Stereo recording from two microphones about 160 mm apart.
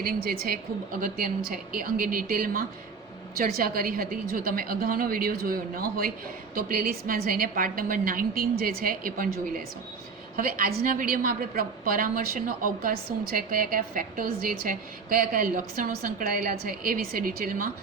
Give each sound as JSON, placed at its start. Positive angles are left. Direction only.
{"t": 0.0, "sound": "a woman's voice", "side_deg": -70}